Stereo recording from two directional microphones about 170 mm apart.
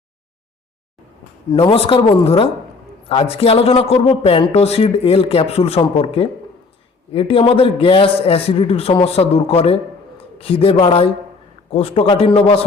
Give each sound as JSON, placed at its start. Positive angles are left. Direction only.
{"t": 1.7, "sound": "speech", "side_deg": 35}